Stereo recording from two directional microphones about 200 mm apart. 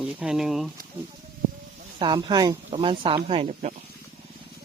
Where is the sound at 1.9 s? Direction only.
20° right (ahead or behind).